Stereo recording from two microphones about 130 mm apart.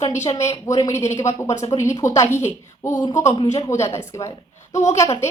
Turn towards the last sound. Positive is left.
turn(degrees=20)  # may be behind; listen again after turning